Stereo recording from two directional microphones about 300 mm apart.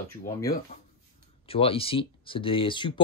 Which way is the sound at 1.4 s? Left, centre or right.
Centre.